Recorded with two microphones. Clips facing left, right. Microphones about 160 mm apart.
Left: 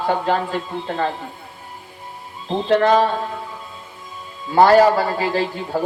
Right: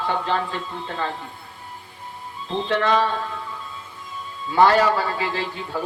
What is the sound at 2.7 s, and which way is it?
Speech, 40° left (ahead or behind).